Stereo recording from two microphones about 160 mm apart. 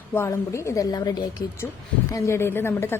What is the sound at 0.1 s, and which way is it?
A woman's voice, 15° left (ahead or behind).